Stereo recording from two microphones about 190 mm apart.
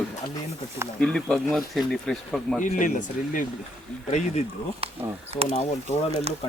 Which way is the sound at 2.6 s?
45° left (ahead or behind).